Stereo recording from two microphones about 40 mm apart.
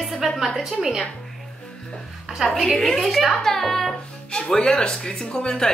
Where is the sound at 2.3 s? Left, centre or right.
Right.